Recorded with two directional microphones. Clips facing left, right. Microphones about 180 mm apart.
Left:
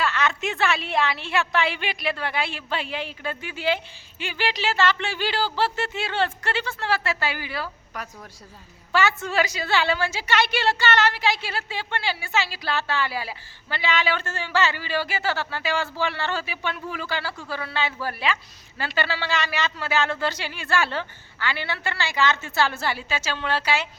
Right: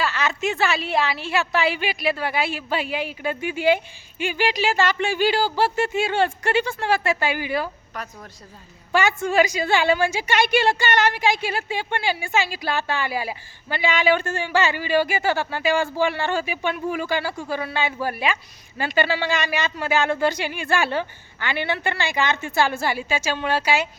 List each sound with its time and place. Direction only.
0.0 s a woman's voice: centre (ahead or behind); by 7.7 s 15° right (ahead or behind)
7.9 s a woman's voice: 10° left (ahead or behind)
8.9 s a woman's voice: 15° right (ahead or behind)